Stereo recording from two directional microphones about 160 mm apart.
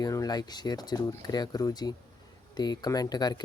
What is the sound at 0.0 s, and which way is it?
Speech, 25° left (ahead or behind).